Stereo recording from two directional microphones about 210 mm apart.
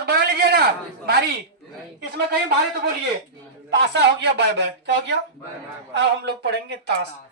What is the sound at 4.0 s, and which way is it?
A man's voice, 50° right (ahead or behind).